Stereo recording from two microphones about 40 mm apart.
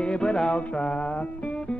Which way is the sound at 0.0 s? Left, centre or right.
Left.